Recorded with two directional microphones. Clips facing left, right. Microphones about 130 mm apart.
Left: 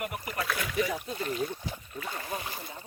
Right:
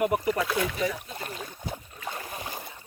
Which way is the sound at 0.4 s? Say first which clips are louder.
Right 6 dB; 25° right (ahead or behind).